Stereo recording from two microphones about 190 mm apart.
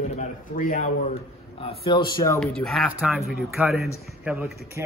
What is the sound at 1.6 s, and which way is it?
Speech, 25° left (ahead or behind).